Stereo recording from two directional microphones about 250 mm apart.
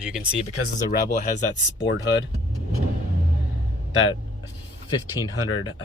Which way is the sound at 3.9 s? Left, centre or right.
Left.